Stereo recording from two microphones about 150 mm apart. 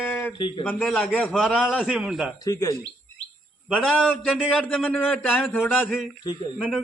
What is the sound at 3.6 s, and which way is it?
A man's voice, centre (ahead or behind).